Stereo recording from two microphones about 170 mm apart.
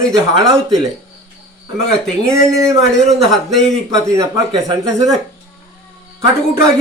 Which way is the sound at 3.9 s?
20° right (ahead or behind).